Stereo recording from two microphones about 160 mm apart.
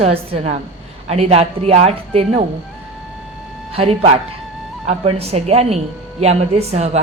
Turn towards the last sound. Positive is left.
turn(degrees=-45)  # may be behind; listen again after turning